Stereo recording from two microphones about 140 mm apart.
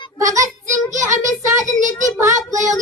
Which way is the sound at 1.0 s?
20° right (ahead or behind).